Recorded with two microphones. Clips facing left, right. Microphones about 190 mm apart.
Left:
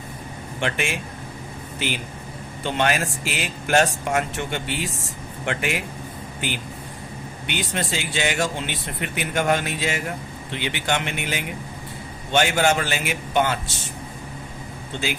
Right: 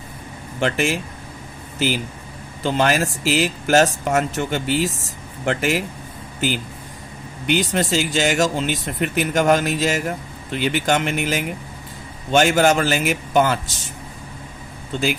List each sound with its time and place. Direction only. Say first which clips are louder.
0.6 s speech: right 6 dB; 40° right (ahead or behind)
2.6 s speech: right 4 dB; 40° right (ahead or behind)
7.6 s speech: right 7 dB; 40° right (ahead or behind)